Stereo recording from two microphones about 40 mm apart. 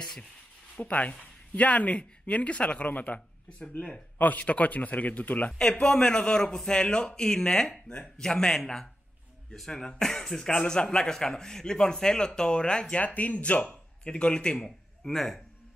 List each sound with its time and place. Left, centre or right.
0.0 s a man's voice: centre
0.7 s a man's voice: left
2.8 s a man's voice: left
5.6 s a man's voice: centre
12.9 s a man's voice: left
15.0 s a man's voice: centre